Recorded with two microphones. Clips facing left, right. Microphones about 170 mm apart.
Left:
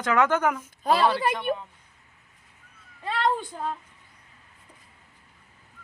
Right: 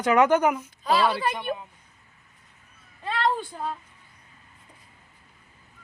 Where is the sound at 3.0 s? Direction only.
10° left (ahead or behind).